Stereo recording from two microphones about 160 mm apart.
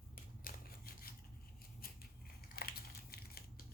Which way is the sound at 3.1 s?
70° left (ahead or behind).